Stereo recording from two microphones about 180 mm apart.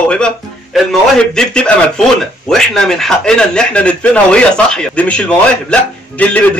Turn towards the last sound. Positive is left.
turn(degrees=5)  # may be behind; listen again after turning